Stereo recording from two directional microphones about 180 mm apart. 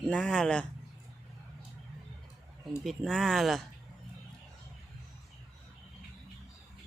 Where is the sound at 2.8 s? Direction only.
Centre (ahead or behind).